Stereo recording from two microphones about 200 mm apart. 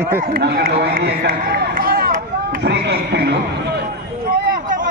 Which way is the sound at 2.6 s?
55° right (ahead or behind).